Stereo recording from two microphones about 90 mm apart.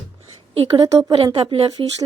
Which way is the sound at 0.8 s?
45° right (ahead or behind).